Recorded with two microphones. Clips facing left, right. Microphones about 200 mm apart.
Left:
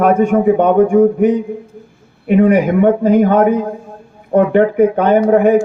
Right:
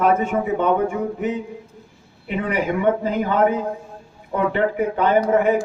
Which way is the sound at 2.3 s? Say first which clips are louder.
Left 12 dB; 50° left (ahead or behind).